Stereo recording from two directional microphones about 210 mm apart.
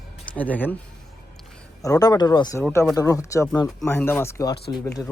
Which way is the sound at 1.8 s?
15° left (ahead or behind).